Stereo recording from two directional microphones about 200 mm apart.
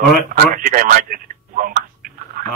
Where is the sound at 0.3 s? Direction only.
45° right (ahead or behind).